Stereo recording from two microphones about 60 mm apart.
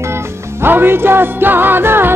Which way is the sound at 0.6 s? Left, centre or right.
Right.